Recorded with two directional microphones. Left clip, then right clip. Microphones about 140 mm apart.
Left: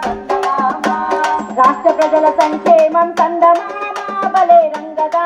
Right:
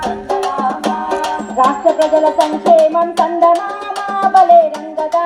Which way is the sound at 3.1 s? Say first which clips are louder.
Left 1 dB; 10° left (ahead or behind).